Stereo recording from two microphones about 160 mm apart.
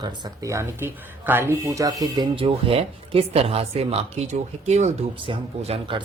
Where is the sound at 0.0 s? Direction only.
20° right (ahead or behind); by 4.9 s 45° right (ahead or behind).